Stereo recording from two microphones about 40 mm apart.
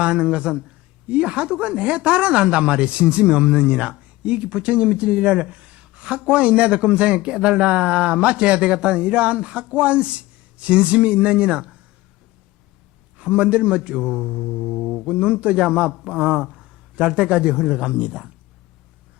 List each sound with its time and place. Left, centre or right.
0.0 s a man's voice: right
13.1 s a man's voice: right; by 14.8 s centre
15.0 s a man's voice: right